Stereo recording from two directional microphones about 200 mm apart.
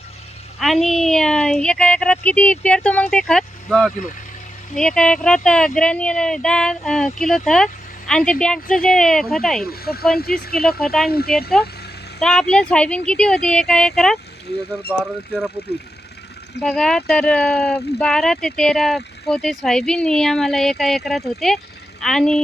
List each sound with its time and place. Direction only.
0.6 s speech: centre (ahead or behind)
9.6 s speech: 50° left (ahead or behind)
12.2 s speech: 5° left (ahead or behind)
16.6 s speech: centre (ahead or behind)